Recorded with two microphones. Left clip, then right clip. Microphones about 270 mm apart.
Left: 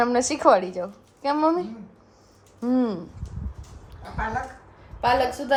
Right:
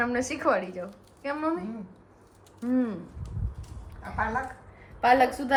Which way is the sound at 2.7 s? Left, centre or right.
Centre.